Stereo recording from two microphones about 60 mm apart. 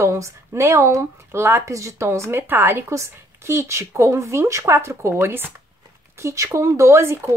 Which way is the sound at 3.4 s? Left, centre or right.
Right.